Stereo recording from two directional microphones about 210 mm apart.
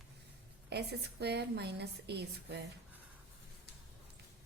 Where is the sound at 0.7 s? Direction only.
50° right (ahead or behind).